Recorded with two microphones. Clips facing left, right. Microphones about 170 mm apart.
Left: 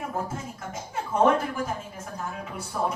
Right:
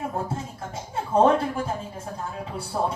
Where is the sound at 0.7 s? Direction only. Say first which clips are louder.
Right 5 dB; 30° right (ahead or behind).